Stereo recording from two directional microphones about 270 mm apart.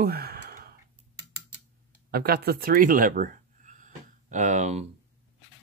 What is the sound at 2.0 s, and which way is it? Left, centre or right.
Speech, right.